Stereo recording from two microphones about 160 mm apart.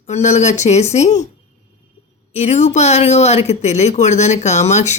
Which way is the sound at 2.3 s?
45° left (ahead or behind).